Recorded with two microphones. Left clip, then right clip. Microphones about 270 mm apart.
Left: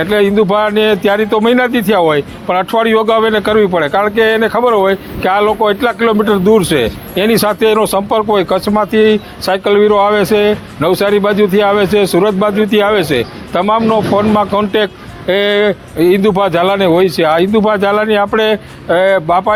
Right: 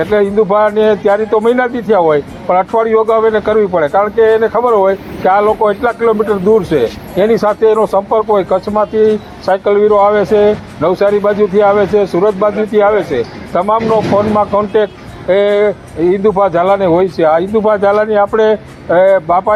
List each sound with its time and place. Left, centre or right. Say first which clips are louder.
0.0 s a man's voice: even; left